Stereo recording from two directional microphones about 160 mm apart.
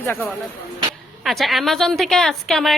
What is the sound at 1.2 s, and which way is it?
A woman's voice, centre (ahead or behind).